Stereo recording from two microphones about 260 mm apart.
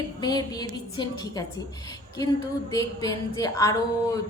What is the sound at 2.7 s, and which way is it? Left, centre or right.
A woman's voice, centre.